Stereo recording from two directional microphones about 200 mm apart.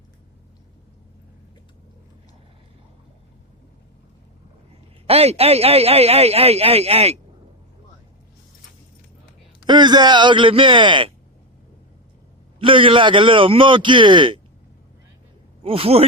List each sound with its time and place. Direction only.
5.0 s speech: 30° right (ahead or behind)
9.6 s a man's voice: 20° right (ahead or behind)
12.5 s a man's voice: 25° right (ahead or behind)
15.6 s a man's voice: 30° right (ahead or behind)